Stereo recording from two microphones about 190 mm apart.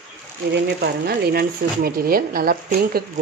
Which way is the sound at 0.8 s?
55° right (ahead or behind).